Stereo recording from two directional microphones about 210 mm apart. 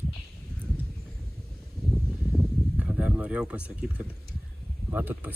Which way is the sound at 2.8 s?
5° right (ahead or behind).